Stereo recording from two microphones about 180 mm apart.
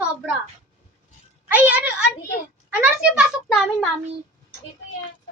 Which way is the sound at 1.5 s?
10° right (ahead or behind).